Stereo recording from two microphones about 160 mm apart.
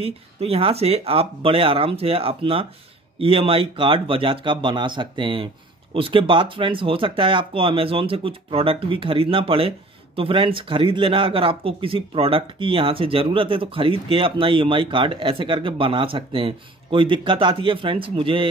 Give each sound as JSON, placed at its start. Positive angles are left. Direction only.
{"t": 0.0, "sound": "speech", "side_deg": -35}